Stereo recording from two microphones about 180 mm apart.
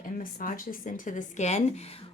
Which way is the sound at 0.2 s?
50° left (ahead or behind).